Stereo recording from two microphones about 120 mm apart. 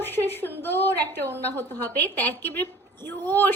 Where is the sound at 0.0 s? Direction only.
20° left (ahead or behind).